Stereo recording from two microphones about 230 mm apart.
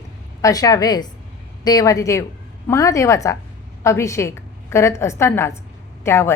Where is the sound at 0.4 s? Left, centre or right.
Centre.